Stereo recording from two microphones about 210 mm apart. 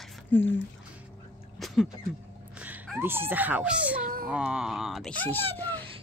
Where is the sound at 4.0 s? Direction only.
40° right (ahead or behind).